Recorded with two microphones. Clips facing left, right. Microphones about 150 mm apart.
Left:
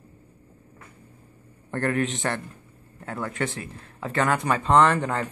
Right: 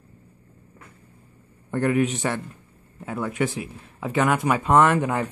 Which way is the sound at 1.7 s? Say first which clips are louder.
Right 4 dB; 5° right (ahead or behind).